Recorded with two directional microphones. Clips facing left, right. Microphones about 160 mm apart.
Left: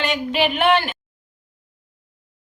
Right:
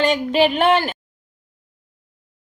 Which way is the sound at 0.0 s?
40° right (ahead or behind).